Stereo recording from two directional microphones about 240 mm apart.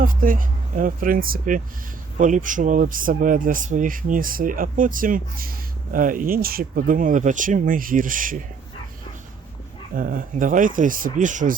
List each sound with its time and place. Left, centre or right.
0.0 s speech: right
9.9 s speech: right